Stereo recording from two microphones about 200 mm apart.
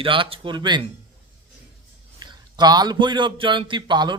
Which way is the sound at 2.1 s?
20° right (ahead or behind).